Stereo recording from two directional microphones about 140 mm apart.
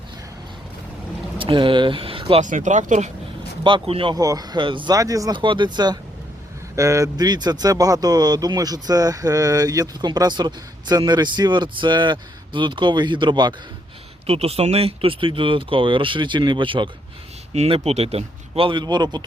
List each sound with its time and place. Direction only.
1.4 s speech: 40° right (ahead or behind)
2.4 s speech: 65° right (ahead or behind)
3.6 s speech: 40° right (ahead or behind)
4.1 s speech: 25° right (ahead or behind)
4.9 s speech: 25° right (ahead or behind)
14.3 s speech: 45° right (ahead or behind)
17.5 s speech: 45° right (ahead or behind); by 19.2 s 30° right (ahead or behind)